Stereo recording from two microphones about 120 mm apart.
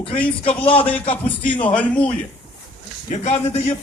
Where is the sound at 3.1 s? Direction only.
65° left (ahead or behind).